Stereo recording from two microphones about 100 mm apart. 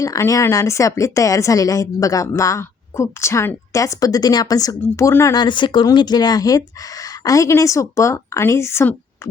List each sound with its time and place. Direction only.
0.0 s a woman's voice: 35° left (ahead or behind)
5.3 s a woman's voice: 50° left (ahead or behind); by 9.3 s 25° left (ahead or behind)